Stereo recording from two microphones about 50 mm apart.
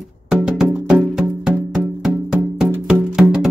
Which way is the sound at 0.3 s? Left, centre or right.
Centre.